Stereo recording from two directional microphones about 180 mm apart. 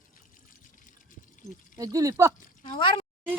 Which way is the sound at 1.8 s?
20° right (ahead or behind).